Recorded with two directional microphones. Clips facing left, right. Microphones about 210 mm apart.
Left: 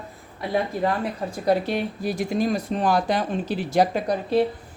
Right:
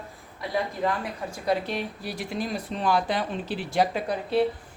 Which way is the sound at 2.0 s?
45° left (ahead or behind).